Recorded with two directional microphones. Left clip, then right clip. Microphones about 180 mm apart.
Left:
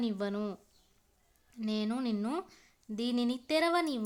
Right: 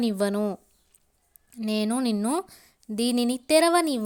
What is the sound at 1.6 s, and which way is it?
Speech, 40° right (ahead or behind).